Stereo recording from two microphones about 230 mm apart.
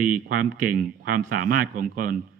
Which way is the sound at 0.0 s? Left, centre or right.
Right.